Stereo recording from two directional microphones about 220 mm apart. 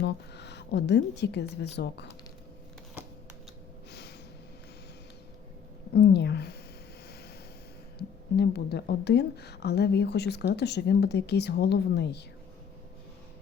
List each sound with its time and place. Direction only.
0.0 s a woman's voice: 50° left (ahead or behind)
5.9 s a sound: 50° left (ahead or behind)
7.9 s a woman's voice: 50° left (ahead or behind)